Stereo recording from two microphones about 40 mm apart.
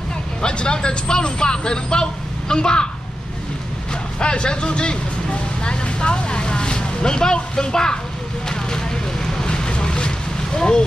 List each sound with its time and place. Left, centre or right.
0.4 s speech: left
4.2 s speech: left
8.5 s vehicle: centre